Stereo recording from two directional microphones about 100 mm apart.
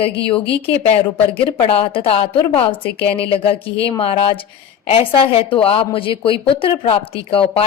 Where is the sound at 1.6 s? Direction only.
70° left (ahead or behind).